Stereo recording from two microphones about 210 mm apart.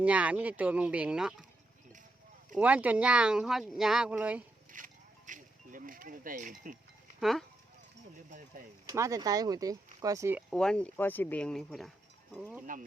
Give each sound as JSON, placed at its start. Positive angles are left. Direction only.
{"t": 0.0, "sound": "speech", "side_deg": -5}
{"t": 2.6, "sound": "speech", "side_deg": -5}
{"t": 4.7, "sound": "music", "side_deg": -40}
{"t": 7.2, "sound": "speech", "side_deg": 0}
{"t": 8.3, "sound": "speech", "side_deg": -40}
{"t": 8.9, "sound": "speech", "side_deg": -15}
{"t": 10.5, "sound": "speech", "side_deg": 5}
{"t": 12.7, "sound": "speech", "side_deg": -40}